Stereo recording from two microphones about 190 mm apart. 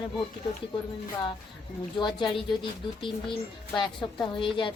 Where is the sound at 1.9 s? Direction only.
25° left (ahead or behind).